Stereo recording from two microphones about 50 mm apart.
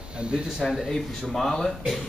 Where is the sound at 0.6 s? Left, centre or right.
Centre.